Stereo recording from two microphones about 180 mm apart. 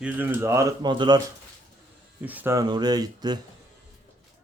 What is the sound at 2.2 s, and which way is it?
Speech, 10° right (ahead or behind).